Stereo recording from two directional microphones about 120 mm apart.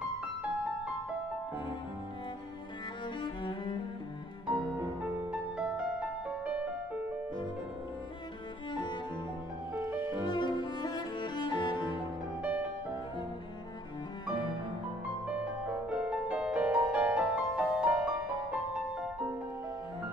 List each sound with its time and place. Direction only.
3.2 s cello: 40° left (ahead or behind)
4.5 s music: 20° right (ahead or behind)
5.3 s music: 10° right (ahead or behind)
9.9 s music: 40° left (ahead or behind)
12.4 s music: 10° right (ahead or behind)
15.2 s music: 10° right (ahead or behind)